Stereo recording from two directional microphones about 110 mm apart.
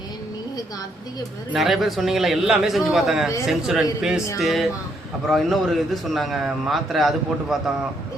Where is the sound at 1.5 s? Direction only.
Centre (ahead or behind).